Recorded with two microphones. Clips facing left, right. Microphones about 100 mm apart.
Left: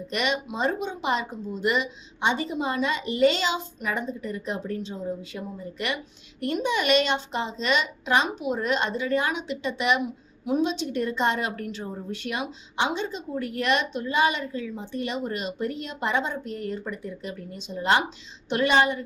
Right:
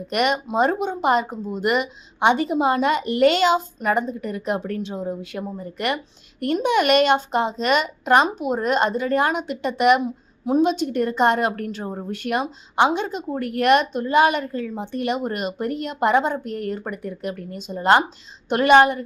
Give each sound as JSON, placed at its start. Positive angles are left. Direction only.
{"t": 0.1, "sound": "speech", "side_deg": -50}
{"t": 10.0, "sound": "a sound", "side_deg": -35}
{"t": 10.6, "sound": "speech", "side_deg": -50}